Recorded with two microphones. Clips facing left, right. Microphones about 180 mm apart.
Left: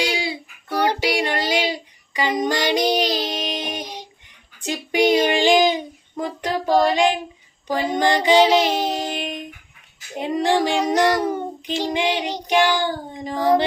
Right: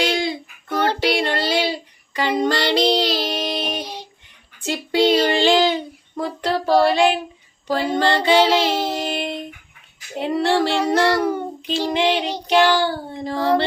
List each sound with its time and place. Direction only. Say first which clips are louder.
0.0 s child singing: right 3 dB; 10° left (ahead or behind)
7.7 s a sound: right 1 dB; 15° left (ahead or behind)
10.2 s child singing: right 1 dB; 15° left (ahead or behind)